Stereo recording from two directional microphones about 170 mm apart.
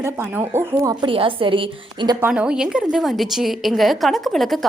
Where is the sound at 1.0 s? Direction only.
30° right (ahead or behind).